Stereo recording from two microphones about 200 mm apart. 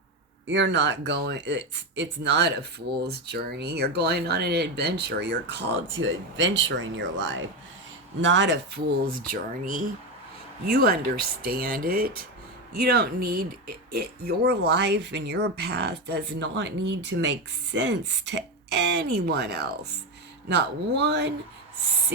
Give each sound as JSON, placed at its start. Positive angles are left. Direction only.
{"t": 0.4, "sound": "speech", "side_deg": -60}